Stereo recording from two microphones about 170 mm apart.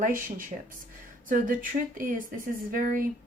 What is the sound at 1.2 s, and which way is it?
Speech, 50° right (ahead or behind).